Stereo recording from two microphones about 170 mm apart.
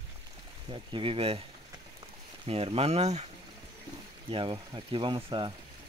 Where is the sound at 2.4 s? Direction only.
35° right (ahead or behind).